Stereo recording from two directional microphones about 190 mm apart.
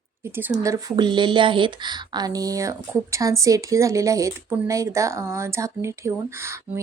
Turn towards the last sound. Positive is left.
turn(degrees=-15)  # may be behind; listen again after turning